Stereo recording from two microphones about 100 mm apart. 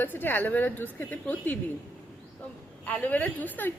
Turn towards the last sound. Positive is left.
turn(degrees=15)  # may be behind; listen again after turning